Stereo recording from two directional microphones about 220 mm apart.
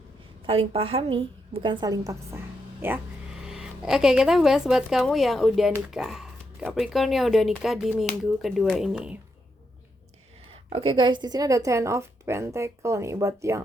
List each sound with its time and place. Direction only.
0.4 s a woman's voice: 25° right (ahead or behind); by 9.1 s 5° right (ahead or behind)
10.7 s a woman's voice: 25° right (ahead or behind)